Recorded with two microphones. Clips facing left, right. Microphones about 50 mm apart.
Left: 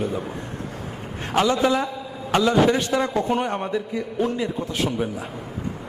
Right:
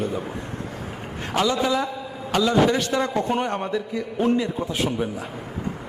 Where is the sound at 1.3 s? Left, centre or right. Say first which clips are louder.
Left 2 dB; left.